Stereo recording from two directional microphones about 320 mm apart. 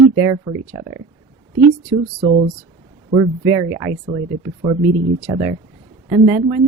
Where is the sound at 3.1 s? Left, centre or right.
Centre.